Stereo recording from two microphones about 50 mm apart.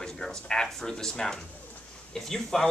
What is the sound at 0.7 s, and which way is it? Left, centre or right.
Speech, centre.